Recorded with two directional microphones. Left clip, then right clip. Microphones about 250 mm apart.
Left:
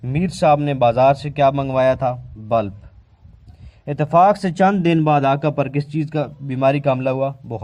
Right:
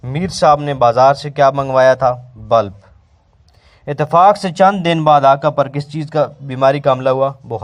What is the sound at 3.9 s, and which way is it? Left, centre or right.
Speech, right.